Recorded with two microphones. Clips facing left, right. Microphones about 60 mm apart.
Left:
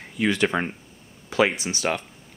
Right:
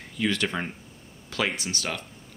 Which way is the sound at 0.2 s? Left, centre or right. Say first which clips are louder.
Left 5 dB; centre.